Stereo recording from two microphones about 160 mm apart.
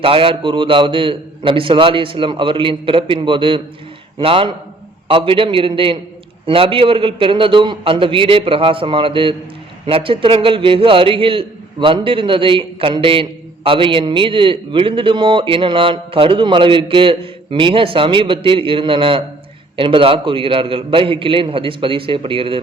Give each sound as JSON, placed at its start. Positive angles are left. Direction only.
{"t": 0.0, "sound": "a man's voice", "side_deg": -35}